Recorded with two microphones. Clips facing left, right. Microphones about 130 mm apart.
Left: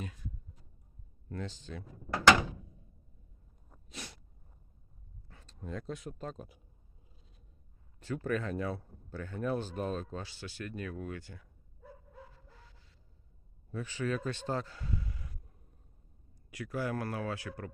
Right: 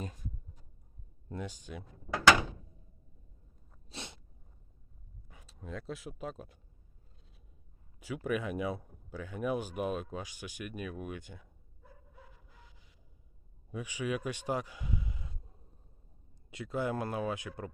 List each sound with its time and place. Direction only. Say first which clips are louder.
1.3 s speech: even; 15° right (ahead or behind)
3.8 s sneeze: right 1 dB; 25° right (ahead or behind)
5.3 s a sound: even; 10° right (ahead or behind)
5.5 s speech: left 1 dB; centre (ahead or behind)
7.9 s speech: even; 10° right (ahead or behind)
12.3 s a sound: left 1 dB; 15° right (ahead or behind)
13.7 s speech: left 1 dB; 15° right (ahead or behind)